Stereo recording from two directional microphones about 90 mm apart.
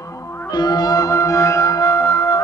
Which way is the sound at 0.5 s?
45° left (ahead or behind).